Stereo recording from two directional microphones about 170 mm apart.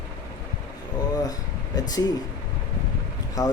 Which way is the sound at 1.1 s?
20° left (ahead or behind).